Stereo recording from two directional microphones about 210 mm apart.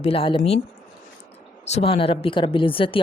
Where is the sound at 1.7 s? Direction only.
30° left (ahead or behind).